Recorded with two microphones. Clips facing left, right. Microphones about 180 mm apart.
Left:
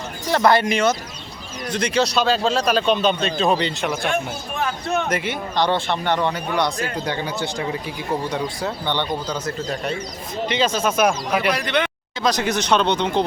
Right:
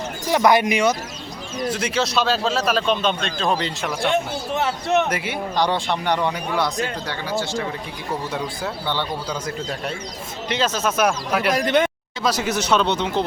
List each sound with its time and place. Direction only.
0.3 s a man's voice: 15° right (ahead or behind)
4.1 s speech: 20° right (ahead or behind)
5.0 s speech: 10° right (ahead or behind)
6.1 s a man's voice: 5° right (ahead or behind)
7.1 s speech: 20° left (ahead or behind)
8.6 s a man's voice: 5° right (ahead or behind)
10.7 s speech: 10° left (ahead or behind)
11.5 s speech: 45° right (ahead or behind)
12.2 s a man's voice: 5° right (ahead or behind)